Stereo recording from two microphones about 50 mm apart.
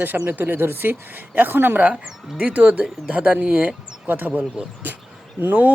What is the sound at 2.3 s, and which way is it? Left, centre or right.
Speech, right.